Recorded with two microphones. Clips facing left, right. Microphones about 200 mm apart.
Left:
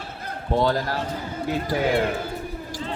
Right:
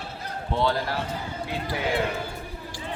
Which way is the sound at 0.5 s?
45° left (ahead or behind).